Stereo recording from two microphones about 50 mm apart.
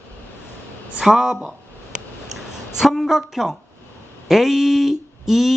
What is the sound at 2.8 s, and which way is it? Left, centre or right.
Speech, centre.